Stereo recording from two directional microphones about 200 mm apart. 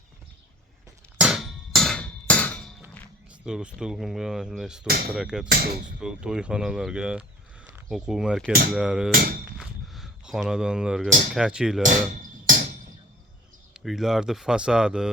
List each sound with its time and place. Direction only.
1.2 s hammer: centre (ahead or behind)
3.4 s speech: 5° right (ahead or behind)
9.1 s speech: 45° right (ahead or behind)
9.6 s a sound: centre (ahead or behind)
11.3 s speech: 5° right (ahead or behind)
11.8 s music: 40° right (ahead or behind)
13.7 s speech: centre (ahead or behind)